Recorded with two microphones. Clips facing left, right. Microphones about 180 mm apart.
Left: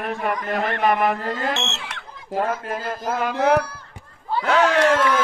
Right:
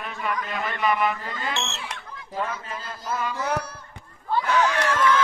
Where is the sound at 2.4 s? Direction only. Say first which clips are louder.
Left 7 dB; 50° left (ahead or behind).